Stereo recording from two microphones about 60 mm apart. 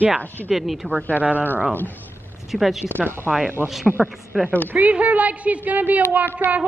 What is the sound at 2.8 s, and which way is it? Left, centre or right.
Speech, right.